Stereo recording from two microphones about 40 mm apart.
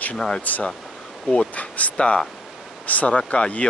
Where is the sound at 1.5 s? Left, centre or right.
Left.